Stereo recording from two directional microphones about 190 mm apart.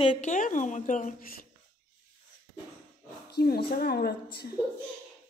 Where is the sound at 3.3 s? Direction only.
60° left (ahead or behind).